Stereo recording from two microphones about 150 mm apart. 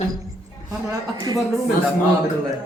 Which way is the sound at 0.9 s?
25° right (ahead or behind).